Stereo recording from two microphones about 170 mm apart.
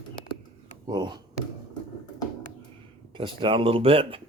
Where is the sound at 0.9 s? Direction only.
25° right (ahead or behind).